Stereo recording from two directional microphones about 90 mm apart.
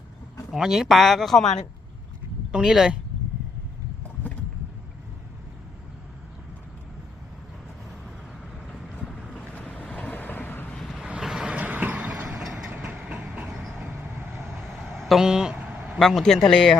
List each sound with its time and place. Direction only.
0.5 s speech: 5° right (ahead or behind)
2.5 s speech: 5° right (ahead or behind)
9.0 s boat: 5° left (ahead or behind)
9.5 s boat: 15° left (ahead or behind)
10.8 s boat: 5° left (ahead or behind)
11.1 s vehicle: 5° right (ahead or behind)
12.7 s vehicle: 15° right (ahead or behind)
14.9 s a sound: centre (ahead or behind)
16.0 s speech: 5° left (ahead or behind)